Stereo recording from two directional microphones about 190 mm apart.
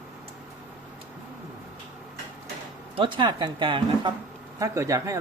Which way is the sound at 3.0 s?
25° right (ahead or behind).